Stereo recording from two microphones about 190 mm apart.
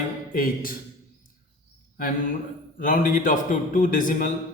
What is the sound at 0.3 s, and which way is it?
Speech, 50° left (ahead or behind).